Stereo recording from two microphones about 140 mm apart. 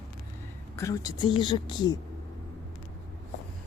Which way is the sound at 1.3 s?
35° left (ahead or behind).